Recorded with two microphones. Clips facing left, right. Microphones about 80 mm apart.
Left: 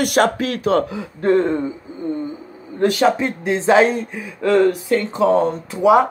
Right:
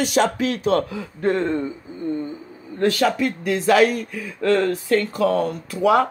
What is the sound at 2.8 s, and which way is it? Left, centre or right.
Speech, left.